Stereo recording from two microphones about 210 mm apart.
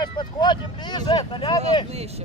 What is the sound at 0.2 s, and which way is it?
Speech, 20° left (ahead or behind).